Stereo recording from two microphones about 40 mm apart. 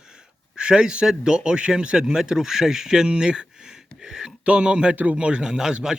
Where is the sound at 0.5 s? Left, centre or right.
Centre.